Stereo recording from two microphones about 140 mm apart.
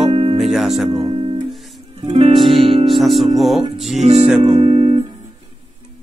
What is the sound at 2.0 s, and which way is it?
Music, 45° right (ahead or behind).